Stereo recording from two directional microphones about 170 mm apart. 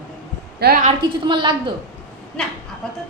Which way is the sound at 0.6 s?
70° right (ahead or behind).